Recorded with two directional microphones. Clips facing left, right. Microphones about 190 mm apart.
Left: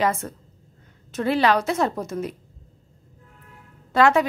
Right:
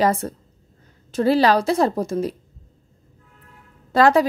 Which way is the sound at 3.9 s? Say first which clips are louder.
Right 3 dB; 35° right (ahead or behind).